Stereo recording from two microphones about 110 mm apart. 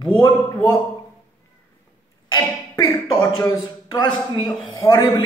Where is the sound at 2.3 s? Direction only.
30° left (ahead or behind).